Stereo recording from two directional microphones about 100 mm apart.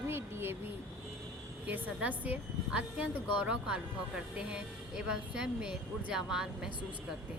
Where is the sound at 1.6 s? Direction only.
15° right (ahead or behind).